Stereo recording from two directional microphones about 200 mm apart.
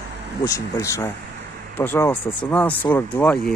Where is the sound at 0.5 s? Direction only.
15° left (ahead or behind).